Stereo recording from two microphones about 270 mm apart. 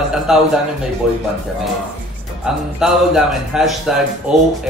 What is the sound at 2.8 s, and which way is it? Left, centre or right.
A man's voice, centre.